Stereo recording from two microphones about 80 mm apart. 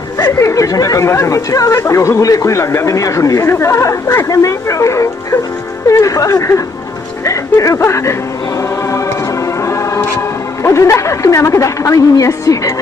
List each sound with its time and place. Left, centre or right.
0.3 s speech: left
8.5 s music: left